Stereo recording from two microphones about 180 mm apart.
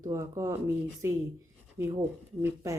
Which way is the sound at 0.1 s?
15° right (ahead or behind).